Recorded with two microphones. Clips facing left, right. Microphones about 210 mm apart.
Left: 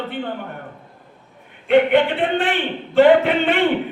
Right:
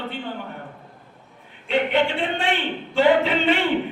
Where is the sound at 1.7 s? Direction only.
55° left (ahead or behind).